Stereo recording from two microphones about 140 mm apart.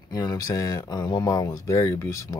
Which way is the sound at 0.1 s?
25° left (ahead or behind).